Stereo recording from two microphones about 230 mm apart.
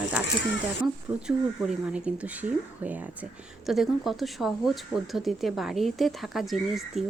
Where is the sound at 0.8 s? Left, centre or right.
Centre.